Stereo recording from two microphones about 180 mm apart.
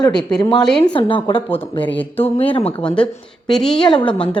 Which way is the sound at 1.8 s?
10° left (ahead or behind).